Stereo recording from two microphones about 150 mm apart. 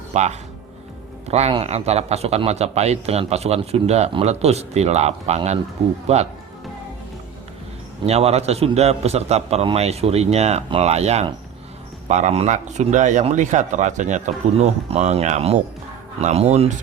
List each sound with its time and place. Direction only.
0.1 s a man's voice: 50° right (ahead or behind)
8.0 s a man's voice: 45° right (ahead or behind)